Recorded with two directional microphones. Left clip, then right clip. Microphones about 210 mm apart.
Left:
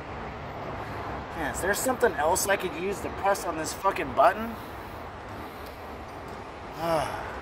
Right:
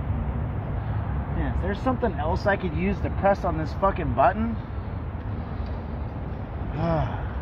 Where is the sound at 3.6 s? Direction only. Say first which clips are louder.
Right 2 dB; 25° left (ahead or behind).